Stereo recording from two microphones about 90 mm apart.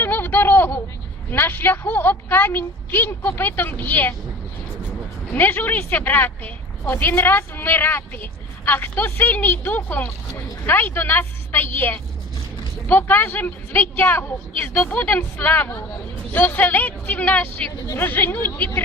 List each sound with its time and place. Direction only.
0.0 s a sound: 20° left (ahead or behind)
1.3 s speech: 20° left (ahead or behind)
5.3 s speech: 25° left (ahead or behind)